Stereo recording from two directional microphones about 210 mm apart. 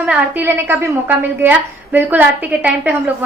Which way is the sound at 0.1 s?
10° right (ahead or behind).